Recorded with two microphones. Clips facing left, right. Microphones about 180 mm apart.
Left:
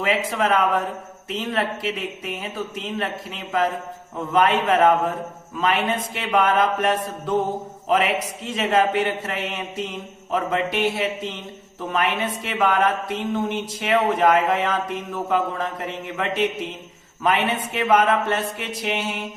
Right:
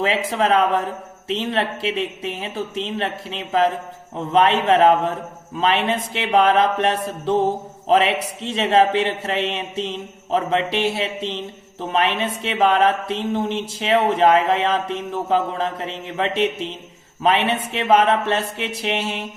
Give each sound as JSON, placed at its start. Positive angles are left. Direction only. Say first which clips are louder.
{"t": 0.0, "sound": "speech", "louder": "right 2 dB", "side_deg": -30}